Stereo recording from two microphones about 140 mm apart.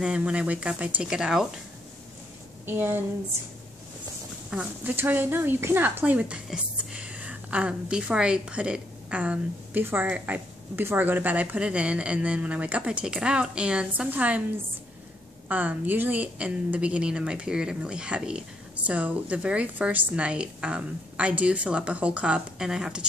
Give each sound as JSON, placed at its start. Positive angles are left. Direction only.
{"t": 0.0, "sound": "speech", "side_deg": -5}
{"t": 2.6, "sound": "speech", "side_deg": -15}
{"t": 4.5, "sound": "speech", "side_deg": -10}
{"t": 15.4, "sound": "speech", "side_deg": -10}